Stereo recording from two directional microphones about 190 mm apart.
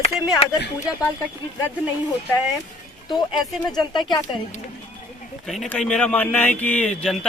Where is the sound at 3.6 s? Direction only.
20° left (ahead or behind).